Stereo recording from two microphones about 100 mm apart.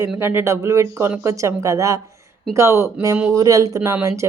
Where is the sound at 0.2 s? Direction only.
25° right (ahead or behind).